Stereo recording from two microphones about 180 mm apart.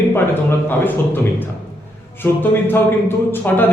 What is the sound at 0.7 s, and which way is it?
A man's voice, 10° left (ahead or behind).